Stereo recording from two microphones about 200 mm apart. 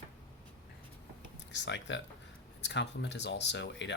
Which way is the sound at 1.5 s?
65° left (ahead or behind).